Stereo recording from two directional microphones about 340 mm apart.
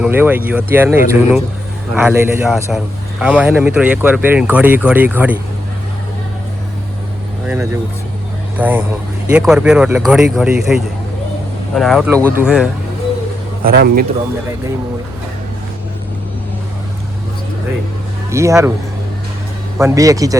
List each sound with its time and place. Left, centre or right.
0.0 s speech: centre
7.4 s speech: centre
13.7 s speech: right
18.3 s speech: centre
19.8 s speech: centre